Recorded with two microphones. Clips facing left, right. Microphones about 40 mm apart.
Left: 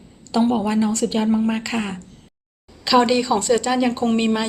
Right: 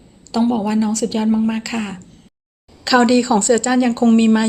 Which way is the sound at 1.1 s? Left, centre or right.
Centre.